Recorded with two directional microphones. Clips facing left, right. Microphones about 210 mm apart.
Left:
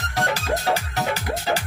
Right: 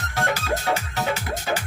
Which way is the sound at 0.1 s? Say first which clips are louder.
Left 1 dB; 35° left (ahead or behind).